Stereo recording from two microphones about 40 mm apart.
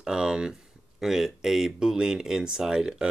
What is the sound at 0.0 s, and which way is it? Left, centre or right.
Speech, centre.